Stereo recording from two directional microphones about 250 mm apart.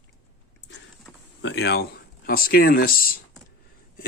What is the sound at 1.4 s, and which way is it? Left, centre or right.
Speech, left.